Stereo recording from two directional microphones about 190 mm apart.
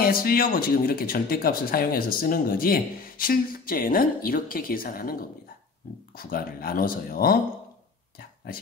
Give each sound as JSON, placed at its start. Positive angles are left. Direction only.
{"t": 0.0, "sound": "speech", "side_deg": 50}